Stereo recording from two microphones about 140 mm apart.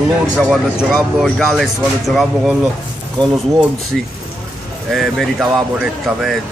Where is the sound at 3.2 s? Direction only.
30° right (ahead or behind).